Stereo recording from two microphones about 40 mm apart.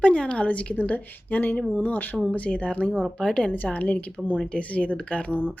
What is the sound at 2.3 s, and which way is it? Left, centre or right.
Speech, left.